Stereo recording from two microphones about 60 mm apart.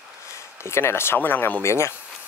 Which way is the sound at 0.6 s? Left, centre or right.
Left.